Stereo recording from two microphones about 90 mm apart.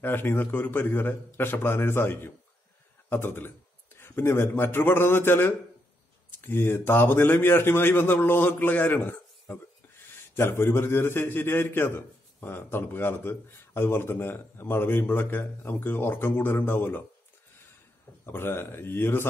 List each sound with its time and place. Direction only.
0.0 s a man's voice: 25° left (ahead or behind)
18.2 s a man's voice: 25° left (ahead or behind)